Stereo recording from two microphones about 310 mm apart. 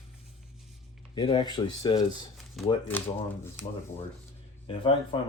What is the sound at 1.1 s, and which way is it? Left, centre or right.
Speech, centre.